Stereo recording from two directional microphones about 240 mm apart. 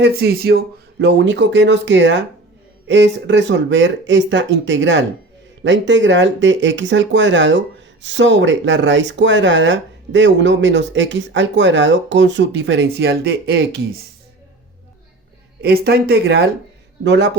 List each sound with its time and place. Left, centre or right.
0.0 s speech: right
15.6 s speech: right